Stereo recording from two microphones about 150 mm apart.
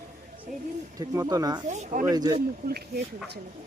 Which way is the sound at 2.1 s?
25° right (ahead or behind).